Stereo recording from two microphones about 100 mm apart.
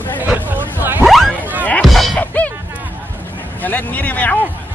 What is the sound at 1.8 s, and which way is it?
Music, centre (ahead or behind).